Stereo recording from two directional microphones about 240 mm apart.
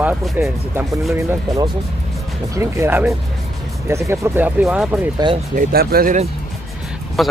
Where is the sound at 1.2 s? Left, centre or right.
Centre.